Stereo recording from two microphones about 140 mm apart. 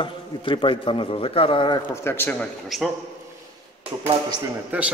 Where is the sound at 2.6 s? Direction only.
Centre (ahead or behind).